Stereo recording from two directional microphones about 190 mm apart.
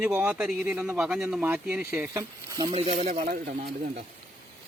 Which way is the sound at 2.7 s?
35° right (ahead or behind).